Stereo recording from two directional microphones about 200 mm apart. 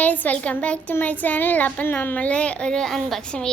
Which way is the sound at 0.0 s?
10° left (ahead or behind).